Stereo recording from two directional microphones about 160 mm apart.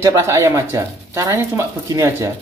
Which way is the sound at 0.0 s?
20° right (ahead or behind).